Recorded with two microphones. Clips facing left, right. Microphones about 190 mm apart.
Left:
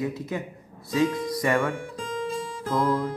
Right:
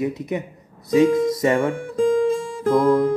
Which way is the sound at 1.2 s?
25° right (ahead or behind).